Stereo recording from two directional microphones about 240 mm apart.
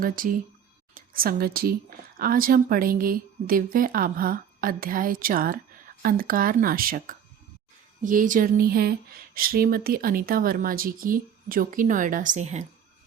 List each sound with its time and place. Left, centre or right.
0.0 s speech: right